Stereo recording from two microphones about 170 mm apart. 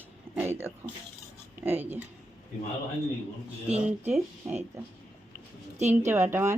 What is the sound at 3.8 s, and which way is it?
Speech, 10° right (ahead or behind).